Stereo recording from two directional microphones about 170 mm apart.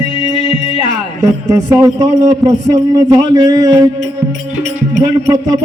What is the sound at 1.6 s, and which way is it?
A man's voice, 20° right (ahead or behind).